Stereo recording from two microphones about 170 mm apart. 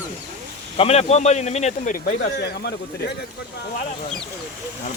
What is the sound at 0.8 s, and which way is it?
A man's voice, 40° left (ahead or behind).